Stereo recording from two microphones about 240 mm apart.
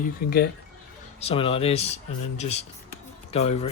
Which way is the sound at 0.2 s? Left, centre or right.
Left.